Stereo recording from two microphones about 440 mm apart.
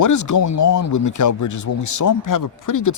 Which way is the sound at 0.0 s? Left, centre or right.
Left.